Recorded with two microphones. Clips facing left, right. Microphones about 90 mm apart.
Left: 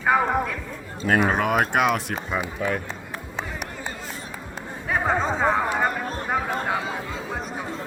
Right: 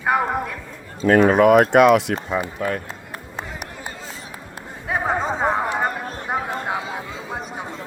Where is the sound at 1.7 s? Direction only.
70° right (ahead or behind).